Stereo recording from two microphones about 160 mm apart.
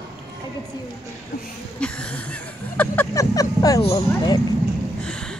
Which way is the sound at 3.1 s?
20° left (ahead or behind).